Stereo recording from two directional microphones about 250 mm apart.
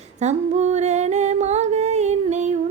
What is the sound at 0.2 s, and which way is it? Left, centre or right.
Humming, right.